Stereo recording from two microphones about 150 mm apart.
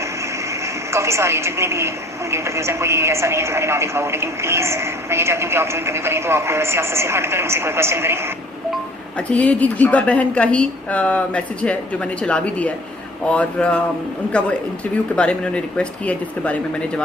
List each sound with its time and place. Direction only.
0.9 s speech: 20° right (ahead or behind)
9.3 s a woman's voice: 10° left (ahead or behind)